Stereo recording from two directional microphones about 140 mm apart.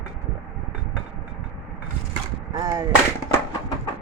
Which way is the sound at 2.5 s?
25° right (ahead or behind).